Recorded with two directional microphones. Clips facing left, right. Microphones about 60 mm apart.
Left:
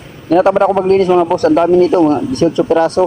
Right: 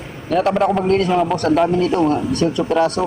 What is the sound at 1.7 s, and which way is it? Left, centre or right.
Mantra, left.